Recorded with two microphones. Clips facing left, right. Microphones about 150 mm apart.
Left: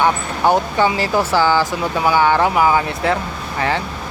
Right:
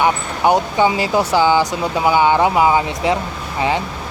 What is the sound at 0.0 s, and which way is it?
Speech, 15° right (ahead or behind).